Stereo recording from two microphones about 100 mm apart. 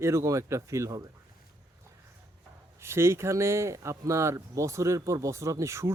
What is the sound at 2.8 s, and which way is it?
Speech, 25° right (ahead or behind).